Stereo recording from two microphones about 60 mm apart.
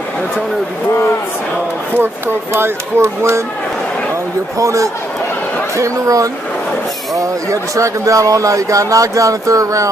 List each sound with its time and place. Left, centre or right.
2.0 s speech: right
4.6 s speech: right
7.7 s speech: right